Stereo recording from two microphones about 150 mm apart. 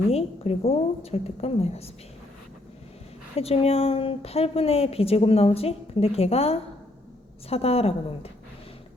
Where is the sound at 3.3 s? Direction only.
40° left (ahead or behind).